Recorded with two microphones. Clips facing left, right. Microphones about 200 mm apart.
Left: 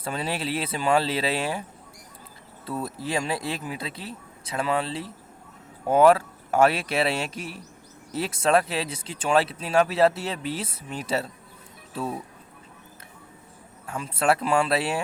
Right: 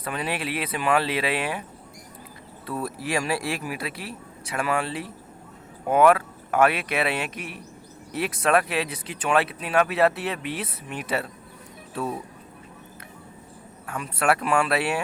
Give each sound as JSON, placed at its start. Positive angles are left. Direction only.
{"t": 0.0, "sound": "speech", "side_deg": 30}
{"t": 2.6, "sound": "speech", "side_deg": 25}
{"t": 13.8, "sound": "speech", "side_deg": 25}